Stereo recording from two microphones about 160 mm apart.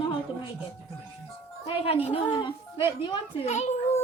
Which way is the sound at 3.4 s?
40° left (ahead or behind).